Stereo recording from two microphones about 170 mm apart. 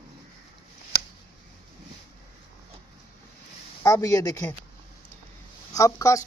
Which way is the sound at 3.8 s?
20° left (ahead or behind).